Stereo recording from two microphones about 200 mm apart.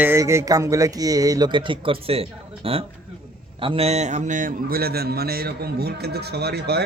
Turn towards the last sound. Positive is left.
turn(degrees=-55)  # may be behind; listen again after turning